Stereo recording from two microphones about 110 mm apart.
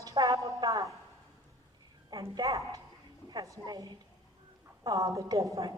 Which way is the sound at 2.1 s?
30° right (ahead or behind).